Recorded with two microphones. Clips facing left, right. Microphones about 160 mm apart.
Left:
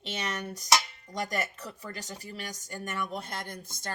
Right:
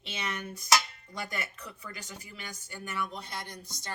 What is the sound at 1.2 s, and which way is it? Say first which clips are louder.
Speech: left 5 dB; 40° left (ahead or behind).